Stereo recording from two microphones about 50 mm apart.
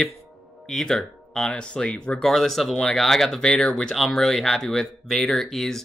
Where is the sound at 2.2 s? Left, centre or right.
Centre.